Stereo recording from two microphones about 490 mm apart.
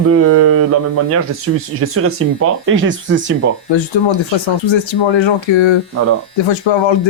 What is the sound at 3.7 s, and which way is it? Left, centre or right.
Speech, left.